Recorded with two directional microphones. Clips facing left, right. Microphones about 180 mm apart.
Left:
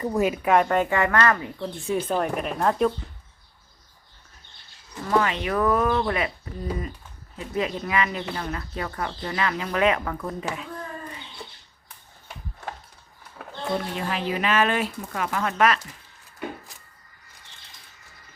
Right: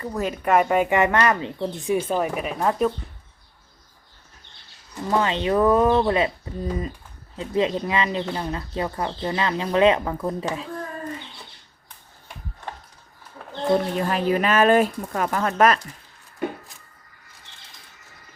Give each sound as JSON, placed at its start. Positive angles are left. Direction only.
{"t": 0.0, "sound": "speech", "side_deg": 15}
{"t": 0.4, "sound": "speech", "side_deg": -5}
{"t": 0.9, "sound": "speech", "side_deg": -20}
{"t": 1.6, "sound": "speech", "side_deg": -10}
{"t": 5.0, "sound": "speech", "side_deg": -25}
{"t": 7.3, "sound": "speech", "side_deg": -30}
{"t": 13.7, "sound": "speech", "side_deg": -45}